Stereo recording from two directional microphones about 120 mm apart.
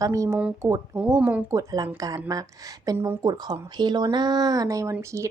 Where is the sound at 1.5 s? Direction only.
30° right (ahead or behind).